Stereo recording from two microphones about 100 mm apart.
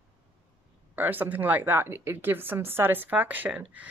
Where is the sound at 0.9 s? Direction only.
20° right (ahead or behind).